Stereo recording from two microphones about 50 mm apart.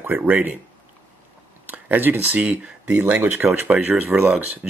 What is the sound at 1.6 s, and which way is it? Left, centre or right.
Speech, right.